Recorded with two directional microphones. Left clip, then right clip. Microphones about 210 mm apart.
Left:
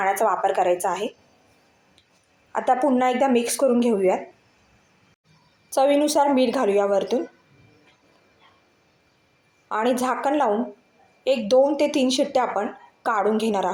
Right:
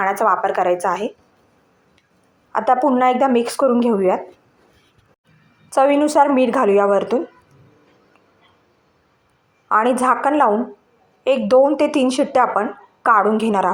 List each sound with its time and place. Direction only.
0.0 s speech: 5° right (ahead or behind)
2.5 s speech: 5° right (ahead or behind)
5.7 s speech: centre (ahead or behind)
9.6 s speech: centre (ahead or behind)